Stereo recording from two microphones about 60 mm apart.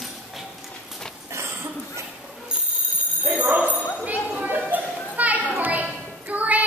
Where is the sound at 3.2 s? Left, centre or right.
Right.